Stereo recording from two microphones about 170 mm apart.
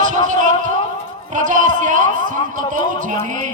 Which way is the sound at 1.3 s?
50° right (ahead or behind).